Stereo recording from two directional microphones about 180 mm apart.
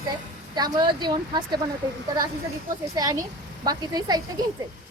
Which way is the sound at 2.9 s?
20° right (ahead or behind).